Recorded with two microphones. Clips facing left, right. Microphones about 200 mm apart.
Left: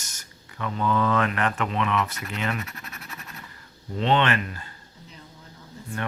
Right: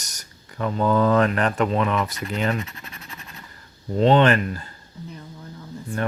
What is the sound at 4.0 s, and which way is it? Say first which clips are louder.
Speech: right 6 dB; 40° right (ahead or behind).